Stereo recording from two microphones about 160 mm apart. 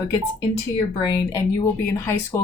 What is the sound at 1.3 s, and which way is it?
Speech, 15° left (ahead or behind).